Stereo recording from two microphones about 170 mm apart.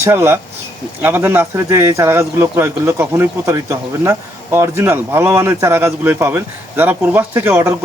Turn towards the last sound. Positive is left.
turn(degrees=-10)  # may be behind; listen again after turning